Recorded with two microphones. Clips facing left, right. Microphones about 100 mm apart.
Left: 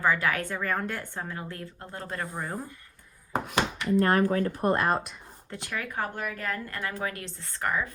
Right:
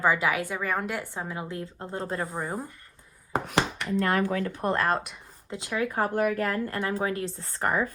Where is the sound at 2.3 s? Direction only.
10° right (ahead or behind).